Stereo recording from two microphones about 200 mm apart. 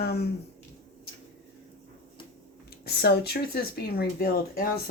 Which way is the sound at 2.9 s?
55° left (ahead or behind).